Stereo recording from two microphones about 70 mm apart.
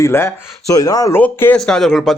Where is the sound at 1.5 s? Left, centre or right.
Centre.